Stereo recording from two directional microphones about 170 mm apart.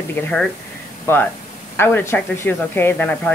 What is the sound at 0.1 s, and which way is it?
Speech, 5° left (ahead or behind).